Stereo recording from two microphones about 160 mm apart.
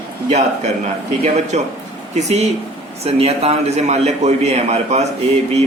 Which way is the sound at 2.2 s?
45° right (ahead or behind).